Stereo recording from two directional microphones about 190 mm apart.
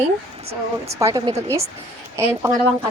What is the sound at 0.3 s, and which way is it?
Speech, 30° right (ahead or behind).